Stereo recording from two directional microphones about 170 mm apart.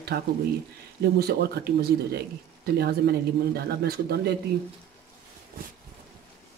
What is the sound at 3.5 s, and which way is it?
Speech, 70° right (ahead or behind).